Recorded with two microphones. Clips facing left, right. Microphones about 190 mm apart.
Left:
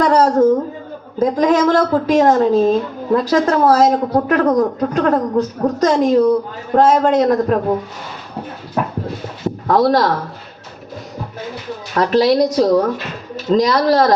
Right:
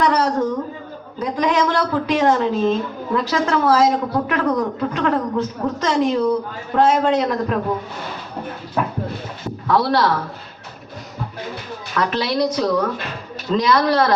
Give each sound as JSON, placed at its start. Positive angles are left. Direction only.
{"t": 0.0, "sound": "a woman's voice", "side_deg": 45}
{"t": 9.6, "sound": "a woman's voice", "side_deg": 45}
{"t": 11.9, "sound": "a woman's voice", "side_deg": 35}